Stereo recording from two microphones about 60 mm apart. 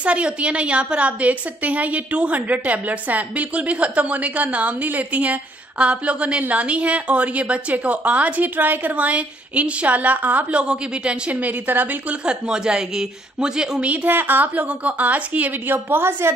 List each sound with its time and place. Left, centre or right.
0.0 s a woman's voice: right
10.6 s a woman's voice: centre
12.3 s a woman's voice: centre
14.0 s a woman's voice: right